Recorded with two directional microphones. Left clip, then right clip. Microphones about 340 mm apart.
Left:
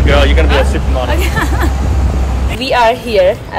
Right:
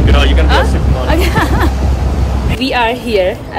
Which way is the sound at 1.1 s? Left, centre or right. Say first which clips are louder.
Right 7 dB; centre.